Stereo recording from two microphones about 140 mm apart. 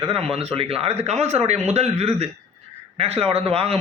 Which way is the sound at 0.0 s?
45° right (ahead or behind).